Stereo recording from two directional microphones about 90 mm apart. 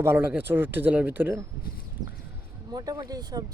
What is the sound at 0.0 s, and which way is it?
Speech, 25° right (ahead or behind).